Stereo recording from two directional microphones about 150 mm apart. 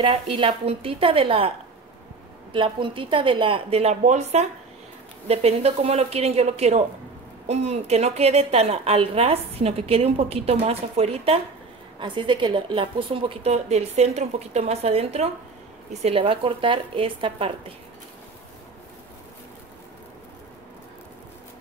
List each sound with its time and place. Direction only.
0.0 s speech: 40° right (ahead or behind)
2.5 s a woman's voice: 35° right (ahead or behind)
12.0 s a woman's voice: 30° right (ahead or behind)